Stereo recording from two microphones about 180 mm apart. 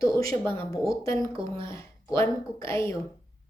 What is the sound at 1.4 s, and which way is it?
Speech, 30° right (ahead or behind).